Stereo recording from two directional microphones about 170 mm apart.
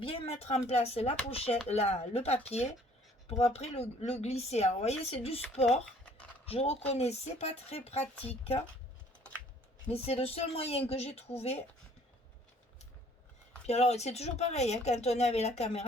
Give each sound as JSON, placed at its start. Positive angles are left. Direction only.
{"t": 0.0, "sound": "speech", "side_deg": 35}
{"t": 6.4, "sound": "speech", "side_deg": 35}
{"t": 9.9, "sound": "speech", "side_deg": 35}
{"t": 13.7, "sound": "speech", "side_deg": 40}